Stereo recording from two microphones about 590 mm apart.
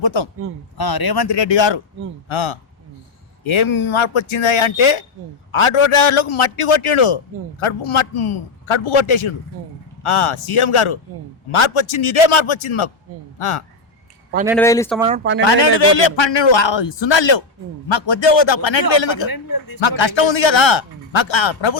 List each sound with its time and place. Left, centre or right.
0.0 s a man's voice: left
13.1 s speech: right
13.4 s speech: left
14.5 s speech: centre
15.0 s speech: centre
15.4 s a man's voice: left